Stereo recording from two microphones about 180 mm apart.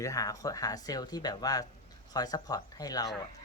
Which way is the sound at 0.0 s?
20° left (ahead or behind).